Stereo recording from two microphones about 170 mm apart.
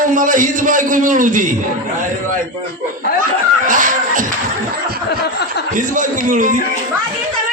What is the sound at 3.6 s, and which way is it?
Speech, 50° right (ahead or behind).